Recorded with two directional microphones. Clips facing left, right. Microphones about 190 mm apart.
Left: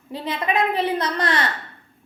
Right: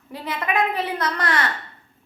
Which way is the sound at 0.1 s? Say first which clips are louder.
Left 2 dB; 25° left (ahead or behind).